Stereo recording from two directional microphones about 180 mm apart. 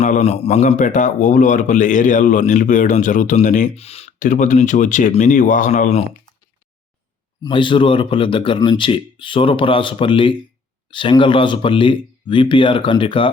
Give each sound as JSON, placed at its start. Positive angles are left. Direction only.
{"t": 0.0, "sound": "a man's voice", "side_deg": 40}
{"t": 7.4, "sound": "a man's voice", "side_deg": 25}